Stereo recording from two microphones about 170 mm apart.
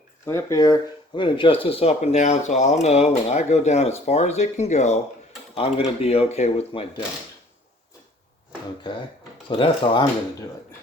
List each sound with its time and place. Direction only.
0.3 s speech: 20° left (ahead or behind); by 6.8 s 35° left (ahead or behind)
8.8 s speech: 25° left (ahead or behind)